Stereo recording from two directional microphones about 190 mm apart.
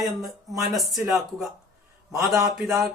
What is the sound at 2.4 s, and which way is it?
Speech, 15° right (ahead or behind).